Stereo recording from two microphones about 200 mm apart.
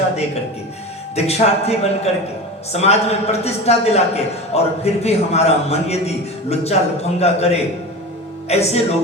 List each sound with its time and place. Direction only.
1.1 s a man's voice: 30° left (ahead or behind)